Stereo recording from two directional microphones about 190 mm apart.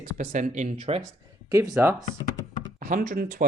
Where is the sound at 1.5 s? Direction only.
15° right (ahead or behind).